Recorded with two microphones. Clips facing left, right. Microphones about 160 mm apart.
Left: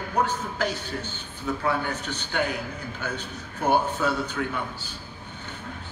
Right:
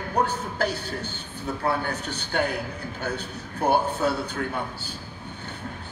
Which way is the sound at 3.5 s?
40° right (ahead or behind).